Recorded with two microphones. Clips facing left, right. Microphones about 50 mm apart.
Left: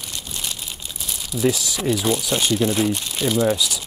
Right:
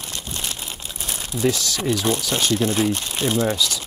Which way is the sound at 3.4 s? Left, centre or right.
Centre.